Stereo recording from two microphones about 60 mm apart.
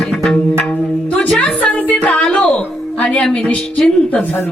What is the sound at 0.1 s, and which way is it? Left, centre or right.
Music, centre.